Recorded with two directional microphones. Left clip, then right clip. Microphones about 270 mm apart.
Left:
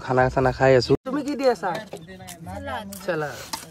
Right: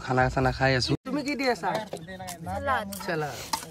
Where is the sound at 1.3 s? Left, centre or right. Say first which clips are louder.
Left 6 dB; left.